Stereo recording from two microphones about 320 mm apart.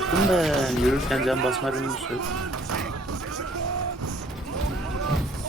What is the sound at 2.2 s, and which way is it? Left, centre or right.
Speech, right.